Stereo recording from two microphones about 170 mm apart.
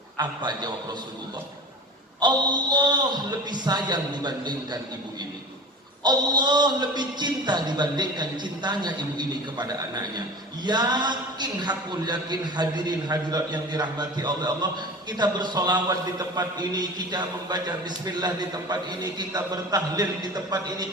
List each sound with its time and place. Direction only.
0.2 s a man's voice: 25° right (ahead or behind)
2.2 s a man's voice: 25° right (ahead or behind)
6.0 s a man's voice: 25° right (ahead or behind)